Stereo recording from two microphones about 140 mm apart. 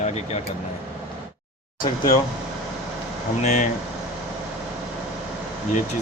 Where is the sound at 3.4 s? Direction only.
55° left (ahead or behind).